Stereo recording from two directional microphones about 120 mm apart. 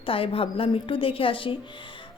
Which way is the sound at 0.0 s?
50° left (ahead or behind).